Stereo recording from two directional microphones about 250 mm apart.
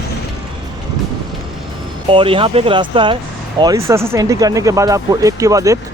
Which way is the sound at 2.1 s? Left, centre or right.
Right.